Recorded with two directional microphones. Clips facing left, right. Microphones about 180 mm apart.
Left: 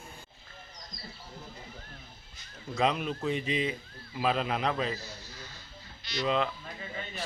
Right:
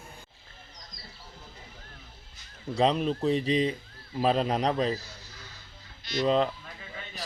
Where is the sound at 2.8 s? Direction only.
35° right (ahead or behind).